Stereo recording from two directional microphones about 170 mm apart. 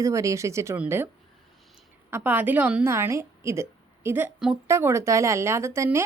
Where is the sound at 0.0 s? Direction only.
20° right (ahead or behind).